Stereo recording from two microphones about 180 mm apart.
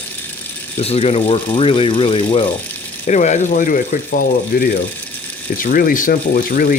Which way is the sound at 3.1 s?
40° left (ahead or behind).